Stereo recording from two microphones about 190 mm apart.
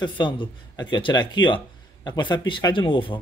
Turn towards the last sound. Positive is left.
turn(degrees=25)  # may be behind; listen again after turning